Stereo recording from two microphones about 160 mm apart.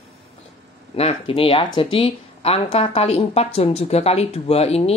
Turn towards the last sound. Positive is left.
turn(degrees=40)  # may be behind; listen again after turning